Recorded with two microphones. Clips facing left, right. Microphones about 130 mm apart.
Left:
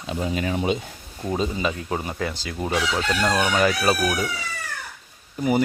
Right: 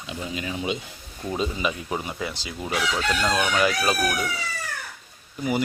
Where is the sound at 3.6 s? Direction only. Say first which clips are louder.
Left 3 dB; 40° left (ahead or behind).